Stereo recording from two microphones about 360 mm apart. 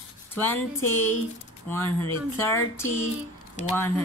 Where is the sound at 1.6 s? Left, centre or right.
Centre.